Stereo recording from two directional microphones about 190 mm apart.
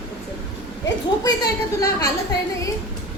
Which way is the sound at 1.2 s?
20° left (ahead or behind).